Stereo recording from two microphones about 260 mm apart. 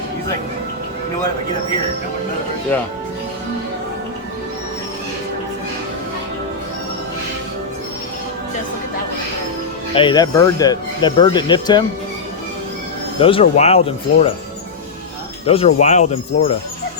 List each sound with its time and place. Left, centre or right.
9.9 s speech: centre
13.1 s speech: left
15.4 s speech: left